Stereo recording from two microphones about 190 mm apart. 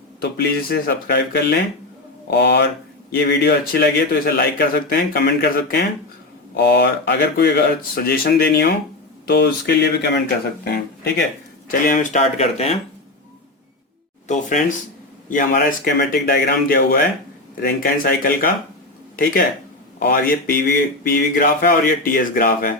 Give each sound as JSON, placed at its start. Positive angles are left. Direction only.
{"t": 0.2, "sound": "speech", "side_deg": 55}
{"t": 11.7, "sound": "speech", "side_deg": 45}
{"t": 15.3, "sound": "speech", "side_deg": 45}